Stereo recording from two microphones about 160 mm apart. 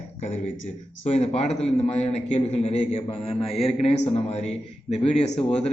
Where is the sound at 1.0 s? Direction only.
40° left (ahead or behind).